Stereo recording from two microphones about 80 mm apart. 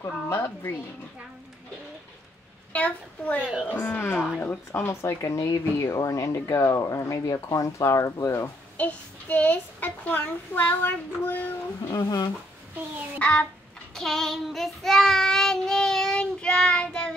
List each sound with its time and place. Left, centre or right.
0.3 s speech: left
2.7 s a child's voice: centre
4.7 s speech: left
8.7 s a child's voice: centre
11.9 s speech: left
13.2 s a child's voice: centre
13.9 s child singing: centre